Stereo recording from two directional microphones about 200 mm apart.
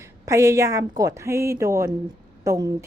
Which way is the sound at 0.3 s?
15° right (ahead or behind).